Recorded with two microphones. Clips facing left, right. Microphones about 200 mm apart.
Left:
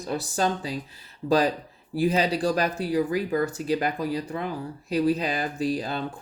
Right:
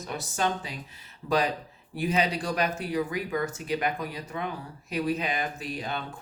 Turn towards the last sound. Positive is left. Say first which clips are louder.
# left 7 dB
turn(degrees=35)  # may be behind; listen again after turning